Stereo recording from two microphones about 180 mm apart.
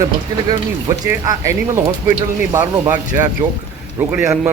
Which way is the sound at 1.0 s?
20° right (ahead or behind).